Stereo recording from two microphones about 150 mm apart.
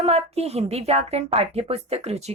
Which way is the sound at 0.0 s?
45° right (ahead or behind).